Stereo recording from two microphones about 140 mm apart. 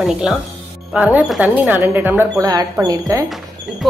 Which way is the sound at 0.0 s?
5° right (ahead or behind).